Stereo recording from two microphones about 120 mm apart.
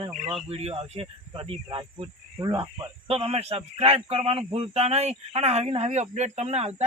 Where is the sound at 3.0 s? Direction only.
55° right (ahead or behind).